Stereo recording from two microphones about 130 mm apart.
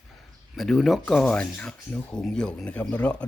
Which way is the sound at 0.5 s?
Centre (ahead or behind).